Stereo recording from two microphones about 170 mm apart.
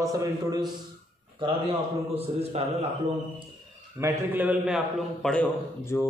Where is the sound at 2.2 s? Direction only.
35° right (ahead or behind).